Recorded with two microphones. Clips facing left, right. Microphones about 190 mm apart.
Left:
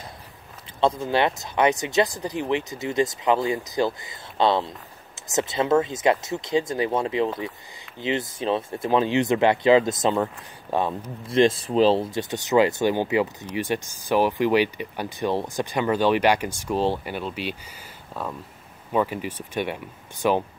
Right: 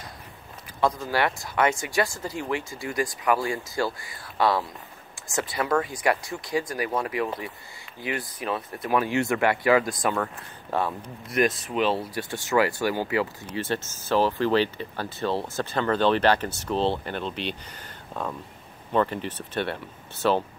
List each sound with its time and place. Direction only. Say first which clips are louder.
0.7 s speech: left 3 dB; 25° left (ahead or behind)